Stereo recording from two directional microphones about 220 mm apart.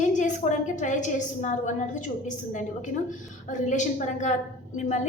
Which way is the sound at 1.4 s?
35° left (ahead or behind).